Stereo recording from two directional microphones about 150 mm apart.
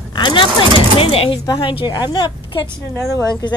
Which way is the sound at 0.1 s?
30° left (ahead or behind).